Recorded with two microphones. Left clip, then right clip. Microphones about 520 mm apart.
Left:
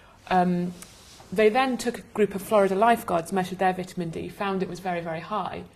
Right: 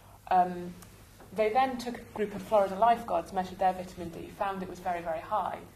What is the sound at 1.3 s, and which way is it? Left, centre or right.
Speech, left.